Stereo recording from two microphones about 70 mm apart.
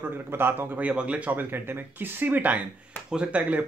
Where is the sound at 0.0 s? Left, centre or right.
Right.